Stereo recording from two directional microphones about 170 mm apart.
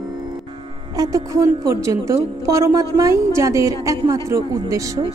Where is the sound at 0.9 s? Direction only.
20° right (ahead or behind).